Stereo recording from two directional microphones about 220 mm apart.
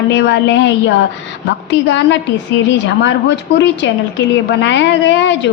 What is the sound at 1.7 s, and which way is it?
A woman's voice, 55° left (ahead or behind).